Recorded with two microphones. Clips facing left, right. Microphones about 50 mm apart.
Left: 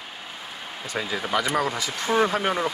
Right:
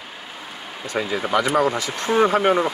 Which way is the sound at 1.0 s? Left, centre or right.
Centre.